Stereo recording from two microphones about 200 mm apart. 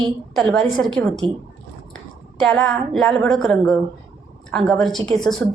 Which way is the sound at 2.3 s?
5° left (ahead or behind).